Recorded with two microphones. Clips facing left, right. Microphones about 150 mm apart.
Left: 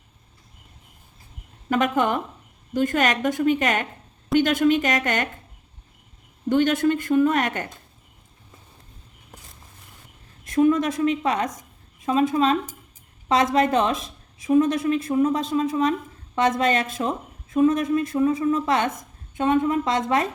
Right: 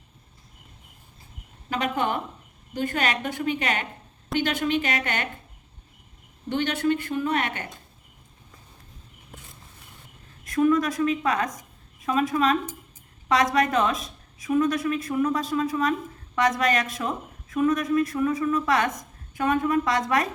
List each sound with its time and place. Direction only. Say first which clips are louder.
1.7 s speech: left 5 dB; 45° left (ahead or behind)
6.5 s speech: left 5 dB; 45° left (ahead or behind)
10.4 s a woman's voice: left 2 dB; 25° left (ahead or behind)